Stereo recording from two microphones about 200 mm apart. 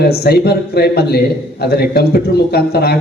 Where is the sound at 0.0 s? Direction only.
50° left (ahead or behind).